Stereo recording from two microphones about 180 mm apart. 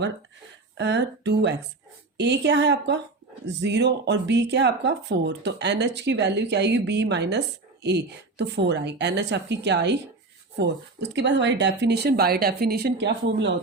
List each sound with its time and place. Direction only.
0.8 s speech: 70° right (ahead or behind)